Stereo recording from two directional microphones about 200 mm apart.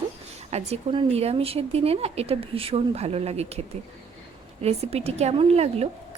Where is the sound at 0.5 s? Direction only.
30° right (ahead or behind).